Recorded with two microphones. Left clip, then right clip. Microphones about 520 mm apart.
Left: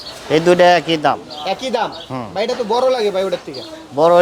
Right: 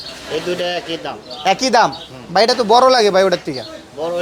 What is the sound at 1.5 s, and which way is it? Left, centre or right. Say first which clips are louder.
A man's voice: right 6 dB; right.